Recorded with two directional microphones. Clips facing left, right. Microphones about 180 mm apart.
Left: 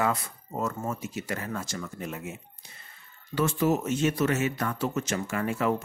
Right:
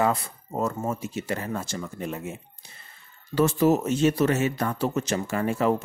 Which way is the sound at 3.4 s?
35° right (ahead or behind).